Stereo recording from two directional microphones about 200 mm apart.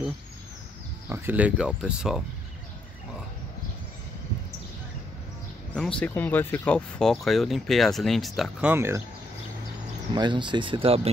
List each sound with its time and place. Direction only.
1.0 s speech: 10° right (ahead or behind)
5.8 s speech: 5° left (ahead or behind); by 9.0 s 10° right (ahead or behind)
10.1 s speech: 20° right (ahead or behind)